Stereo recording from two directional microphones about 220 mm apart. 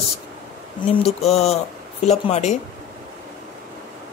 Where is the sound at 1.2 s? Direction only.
30° left (ahead or behind).